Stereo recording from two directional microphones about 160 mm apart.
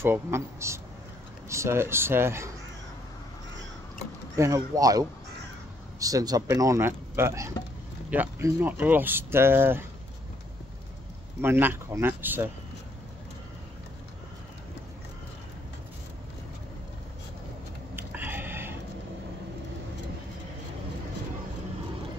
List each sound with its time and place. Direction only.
0.0 s speech: 15° right (ahead or behind)
4.4 s speech: 20° right (ahead or behind)
11.4 s speech: 15° right (ahead or behind)
17.9 s a sound: 10° right (ahead or behind)